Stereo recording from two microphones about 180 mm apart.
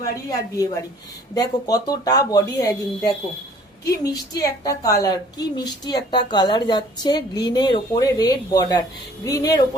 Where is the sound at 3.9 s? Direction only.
20° left (ahead or behind).